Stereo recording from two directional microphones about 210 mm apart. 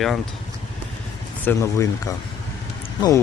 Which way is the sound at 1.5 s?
15° left (ahead or behind).